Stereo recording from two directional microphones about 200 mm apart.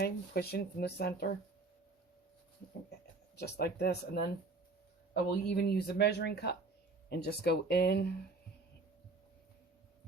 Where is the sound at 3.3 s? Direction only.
55° left (ahead or behind).